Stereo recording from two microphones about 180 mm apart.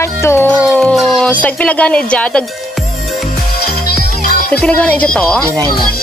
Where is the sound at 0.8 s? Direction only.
Centre (ahead or behind).